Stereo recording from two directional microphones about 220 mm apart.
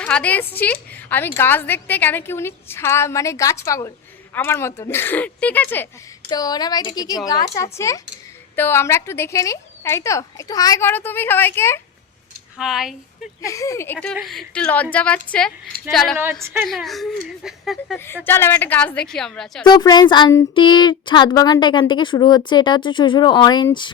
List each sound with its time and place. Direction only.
0.0 s a woman's voice: 5° left (ahead or behind)
12.5 s a woman's voice: centre (ahead or behind)
13.4 s a woman's voice: 15° left (ahead or behind)
16.4 s a woman's voice: 10° right (ahead or behind)
17.9 s a woman's voice: 10° left (ahead or behind)
19.6 s speech: 20° left (ahead or behind)